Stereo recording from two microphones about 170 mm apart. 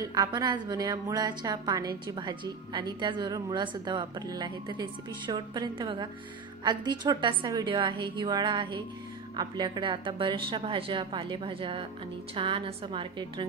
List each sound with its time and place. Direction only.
0.0 s a woman's voice: 25° right (ahead or behind)